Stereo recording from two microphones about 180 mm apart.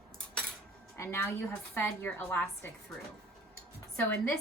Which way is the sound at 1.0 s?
15° left (ahead or behind).